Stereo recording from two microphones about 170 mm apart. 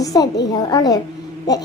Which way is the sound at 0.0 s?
20° left (ahead or behind).